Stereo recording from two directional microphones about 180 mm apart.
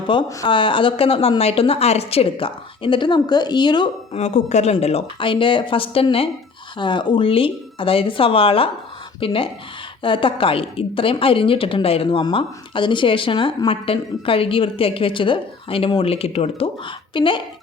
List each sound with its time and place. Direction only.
0.1 s a woman's voice: 25° left (ahead or behind)
4.1 s a woman's voice: 40° left (ahead or behind)